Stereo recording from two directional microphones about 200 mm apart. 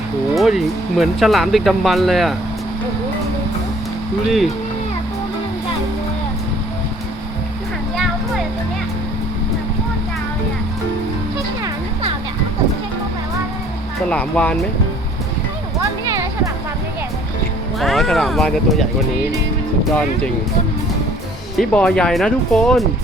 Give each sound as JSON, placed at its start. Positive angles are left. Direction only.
{"t": 0.3, "sound": "speech", "side_deg": 0}
{"t": 14.1, "sound": "speech", "side_deg": 5}
{"t": 15.8, "sound": "a sound", "side_deg": -15}
{"t": 17.7, "sound": "speech", "side_deg": 0}
{"t": 21.6, "sound": "speech", "side_deg": 5}